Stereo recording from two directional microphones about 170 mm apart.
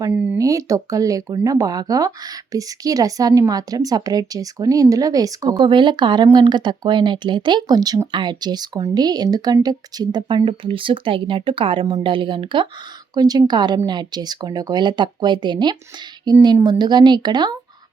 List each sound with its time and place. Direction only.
0.1 s speech: 5° right (ahead or behind)
0.3 s speech: 20° right (ahead or behind)